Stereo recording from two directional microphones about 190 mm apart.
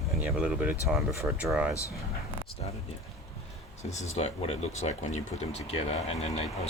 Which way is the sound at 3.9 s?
35° left (ahead or behind).